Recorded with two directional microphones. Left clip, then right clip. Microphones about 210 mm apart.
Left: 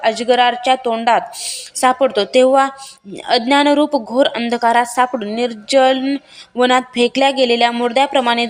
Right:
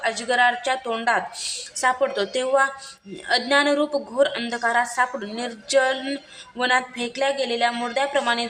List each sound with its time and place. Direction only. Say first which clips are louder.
0.0 s a woman's voice: left 7 dB; 30° left (ahead or behind)